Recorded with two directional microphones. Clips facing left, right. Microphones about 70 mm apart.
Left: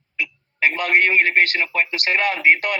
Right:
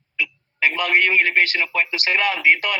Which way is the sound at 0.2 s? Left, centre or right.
Left.